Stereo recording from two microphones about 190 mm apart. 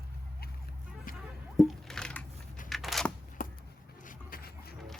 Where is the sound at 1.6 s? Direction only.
Centre (ahead or behind).